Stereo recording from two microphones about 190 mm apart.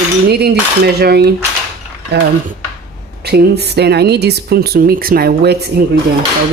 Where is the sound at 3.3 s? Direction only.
60° right (ahead or behind).